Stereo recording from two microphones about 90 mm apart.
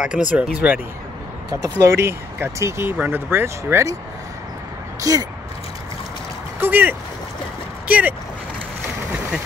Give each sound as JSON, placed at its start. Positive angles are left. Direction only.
{"t": 0.0, "sound": "speech", "side_deg": -10}
{"t": 1.5, "sound": "speech", "side_deg": -35}
{"t": 5.1, "sound": "speech", "side_deg": -40}
{"t": 6.6, "sound": "speech", "side_deg": -20}